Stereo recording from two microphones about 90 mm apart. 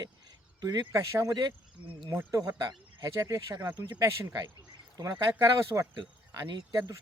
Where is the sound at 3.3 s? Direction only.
50° right (ahead or behind).